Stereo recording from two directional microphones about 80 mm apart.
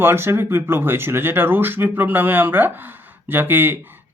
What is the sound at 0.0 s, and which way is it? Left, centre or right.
Speech, right.